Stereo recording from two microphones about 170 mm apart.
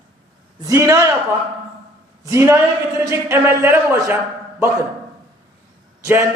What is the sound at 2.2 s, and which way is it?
A man's voice, 15° right (ahead or behind).